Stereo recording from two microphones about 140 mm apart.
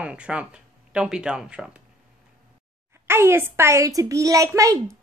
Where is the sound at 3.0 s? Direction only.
15° right (ahead or behind).